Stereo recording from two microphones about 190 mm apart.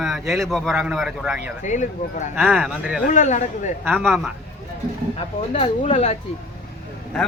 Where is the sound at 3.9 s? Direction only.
Centre (ahead or behind).